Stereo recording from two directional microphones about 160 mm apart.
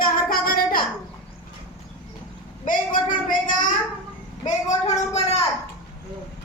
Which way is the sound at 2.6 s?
55° left (ahead or behind).